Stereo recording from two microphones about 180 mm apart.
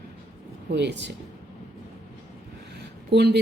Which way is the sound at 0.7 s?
70° right (ahead or behind).